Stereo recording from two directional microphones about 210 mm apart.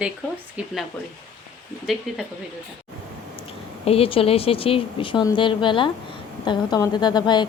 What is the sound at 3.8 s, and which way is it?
A woman's voice, 25° left (ahead or behind).